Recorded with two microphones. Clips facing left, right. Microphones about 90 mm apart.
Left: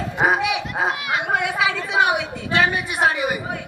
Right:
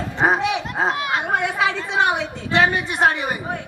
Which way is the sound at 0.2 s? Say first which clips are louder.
Right 1 dB; 10° left (ahead or behind).